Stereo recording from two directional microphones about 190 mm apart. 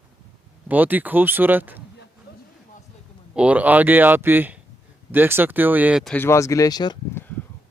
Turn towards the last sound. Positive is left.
turn(degrees=20)  # may be behind; listen again after turning